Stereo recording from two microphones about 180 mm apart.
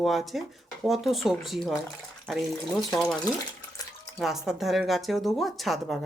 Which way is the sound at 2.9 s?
Centre (ahead or behind).